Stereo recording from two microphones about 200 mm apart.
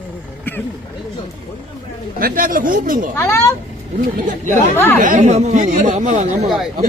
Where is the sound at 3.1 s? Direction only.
15° left (ahead or behind).